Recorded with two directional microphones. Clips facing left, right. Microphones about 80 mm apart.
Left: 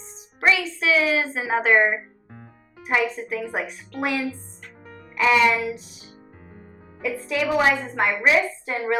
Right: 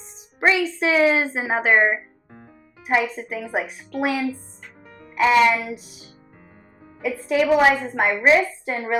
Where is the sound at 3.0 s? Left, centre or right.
Centre.